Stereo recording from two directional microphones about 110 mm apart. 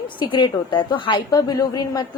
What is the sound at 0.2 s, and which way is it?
A woman's voice, 45° left (ahead or behind).